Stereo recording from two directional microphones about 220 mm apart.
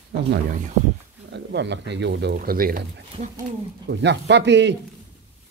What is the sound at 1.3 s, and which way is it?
Speech, 50° right (ahead or behind).